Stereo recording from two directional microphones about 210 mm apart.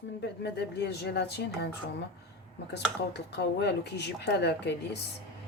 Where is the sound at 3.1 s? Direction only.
55° left (ahead or behind).